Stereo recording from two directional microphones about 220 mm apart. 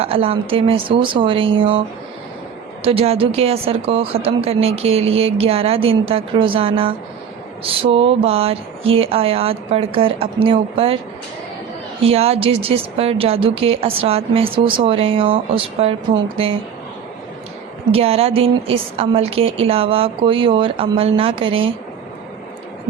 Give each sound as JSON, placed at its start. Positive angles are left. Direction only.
{"t": 0.0, "sound": "a woman's voice", "side_deg": -25}
{"t": 2.8, "sound": "a woman's voice", "side_deg": -25}
{"t": 12.0, "sound": "a woman's voice", "side_deg": -25}
{"t": 17.9, "sound": "a woman's voice", "side_deg": -25}